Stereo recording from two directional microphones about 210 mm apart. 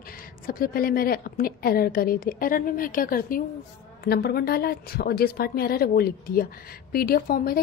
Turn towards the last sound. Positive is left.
turn(degrees=45)  # may be behind; listen again after turning